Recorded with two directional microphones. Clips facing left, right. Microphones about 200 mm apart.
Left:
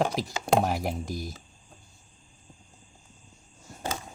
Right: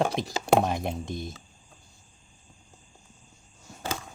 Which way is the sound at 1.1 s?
25° right (ahead or behind).